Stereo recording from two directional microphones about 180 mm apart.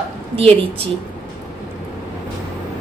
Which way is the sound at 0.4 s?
30° right (ahead or behind).